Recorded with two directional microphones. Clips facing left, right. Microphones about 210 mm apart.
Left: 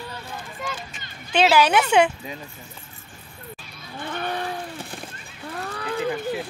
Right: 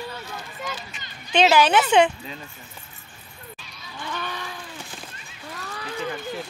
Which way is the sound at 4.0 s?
55° left (ahead or behind).